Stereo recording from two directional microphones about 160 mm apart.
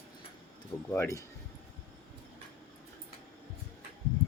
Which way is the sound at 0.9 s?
15° left (ahead or behind).